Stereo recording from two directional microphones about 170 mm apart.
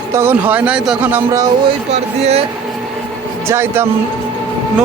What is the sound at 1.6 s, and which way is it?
Speech, 40° right (ahead or behind).